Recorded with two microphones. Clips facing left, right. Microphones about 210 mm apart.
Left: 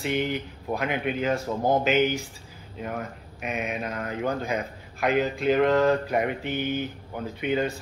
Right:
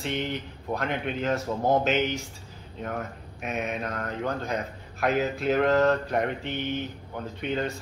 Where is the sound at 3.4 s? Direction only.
Centre (ahead or behind).